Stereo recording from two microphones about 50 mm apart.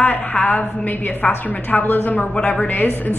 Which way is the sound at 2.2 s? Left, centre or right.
Left.